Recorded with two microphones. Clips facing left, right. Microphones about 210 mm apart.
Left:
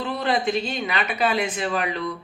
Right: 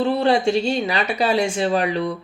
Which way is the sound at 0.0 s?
30° right (ahead or behind).